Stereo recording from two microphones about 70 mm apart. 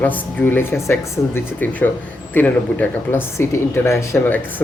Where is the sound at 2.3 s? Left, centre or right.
Left.